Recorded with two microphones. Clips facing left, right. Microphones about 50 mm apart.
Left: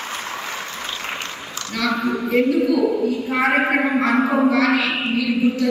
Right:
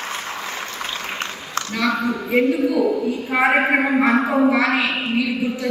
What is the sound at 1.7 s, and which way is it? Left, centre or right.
Speech, centre.